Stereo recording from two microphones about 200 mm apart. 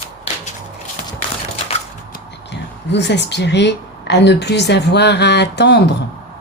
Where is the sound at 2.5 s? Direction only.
60° left (ahead or behind).